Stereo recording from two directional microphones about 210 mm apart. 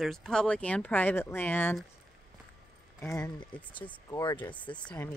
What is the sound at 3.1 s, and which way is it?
Speech, 15° left (ahead or behind).